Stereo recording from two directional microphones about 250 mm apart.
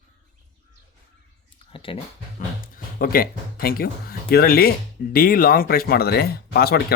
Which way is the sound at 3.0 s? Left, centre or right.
Left.